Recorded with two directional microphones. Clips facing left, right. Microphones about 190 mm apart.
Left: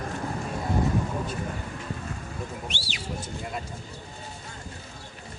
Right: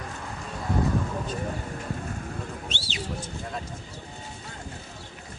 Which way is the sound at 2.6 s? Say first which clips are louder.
Right 1 dB; 20° right (ahead or behind).